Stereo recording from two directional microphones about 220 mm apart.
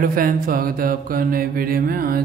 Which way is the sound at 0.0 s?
40° right (ahead or behind).